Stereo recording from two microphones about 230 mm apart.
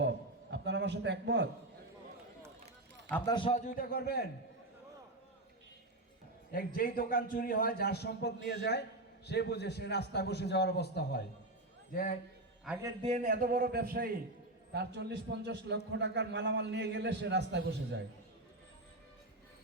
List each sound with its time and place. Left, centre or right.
0.5 s a sound: right
3.1 s a man's voice: centre
3.3 s a man's voice: left
6.7 s a man's voice: left
12.6 s a man's voice: centre
13.0 s a man's voice: right